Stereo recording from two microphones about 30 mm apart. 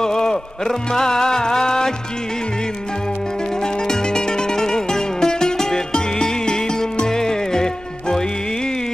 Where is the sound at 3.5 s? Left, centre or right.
Left.